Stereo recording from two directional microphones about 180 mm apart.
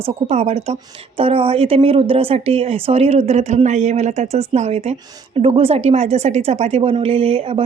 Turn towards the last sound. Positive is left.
turn(degrees=-30)  # may be behind; listen again after turning